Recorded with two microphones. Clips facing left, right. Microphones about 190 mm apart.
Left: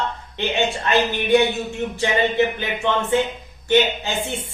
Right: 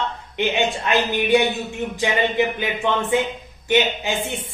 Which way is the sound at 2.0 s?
15° right (ahead or behind).